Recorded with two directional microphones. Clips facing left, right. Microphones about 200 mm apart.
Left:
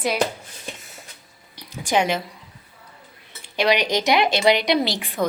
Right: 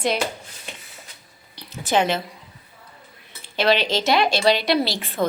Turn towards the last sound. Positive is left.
turn(degrees=15)  # may be behind; listen again after turning